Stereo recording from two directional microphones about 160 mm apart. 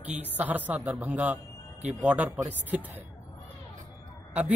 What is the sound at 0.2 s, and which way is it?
A man's voice, 10° right (ahead or behind).